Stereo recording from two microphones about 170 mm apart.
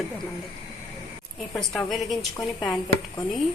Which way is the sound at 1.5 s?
Centre (ahead or behind).